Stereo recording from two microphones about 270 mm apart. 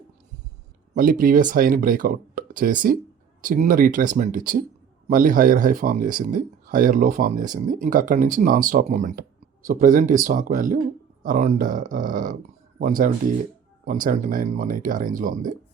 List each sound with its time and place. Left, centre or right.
0.9 s speech: right